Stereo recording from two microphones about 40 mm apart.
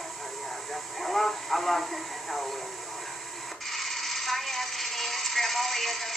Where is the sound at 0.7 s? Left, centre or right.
Centre.